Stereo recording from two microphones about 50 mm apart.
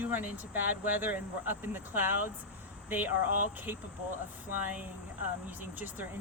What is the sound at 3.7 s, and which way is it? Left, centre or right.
Speech, right.